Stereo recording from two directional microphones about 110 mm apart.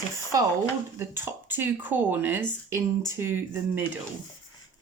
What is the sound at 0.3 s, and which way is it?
Speech, 35° right (ahead or behind).